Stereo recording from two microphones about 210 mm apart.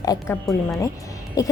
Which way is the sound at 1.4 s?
15° left (ahead or behind).